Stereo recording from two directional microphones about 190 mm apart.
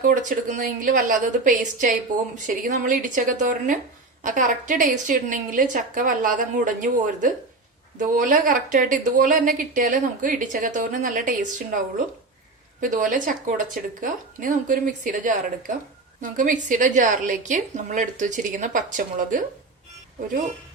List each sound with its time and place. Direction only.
0.0 s a woman's voice: 45° right (ahead or behind)